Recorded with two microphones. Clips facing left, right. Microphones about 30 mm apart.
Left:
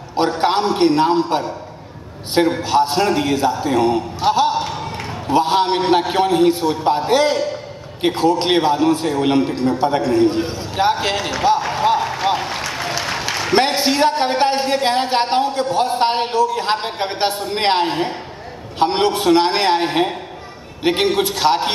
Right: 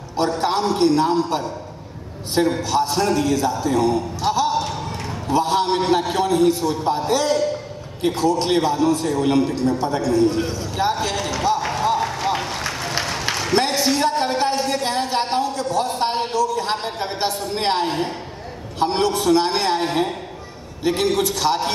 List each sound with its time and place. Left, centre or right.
0.1 s a man's voice: left
2.6 s a man's voice: left
4.6 s a sound: left
5.9 s a man's voice: left
12.0 s applause: left
13.5 s a man's voice: left
17.8 s a man's voice: left
18.8 s a man's voice: left